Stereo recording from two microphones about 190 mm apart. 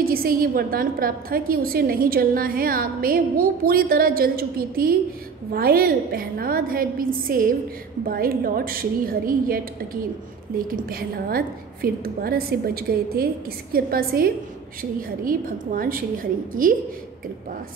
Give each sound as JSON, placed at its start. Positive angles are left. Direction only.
{"t": 0.0, "sound": "a woman's voice", "side_deg": -50}
{"t": 10.7, "sound": "a woman's voice", "side_deg": -50}